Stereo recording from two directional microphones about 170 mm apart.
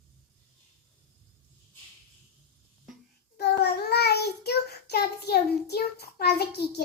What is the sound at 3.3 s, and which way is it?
Child singing, 70° left (ahead or behind).